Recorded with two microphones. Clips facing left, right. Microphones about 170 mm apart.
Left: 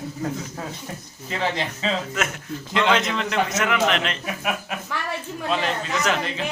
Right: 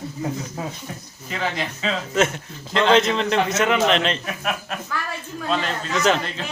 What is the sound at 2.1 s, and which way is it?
A man's voice, 30° right (ahead or behind).